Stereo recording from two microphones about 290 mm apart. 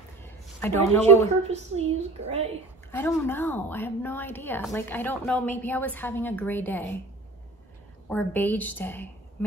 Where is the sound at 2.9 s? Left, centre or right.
Centre.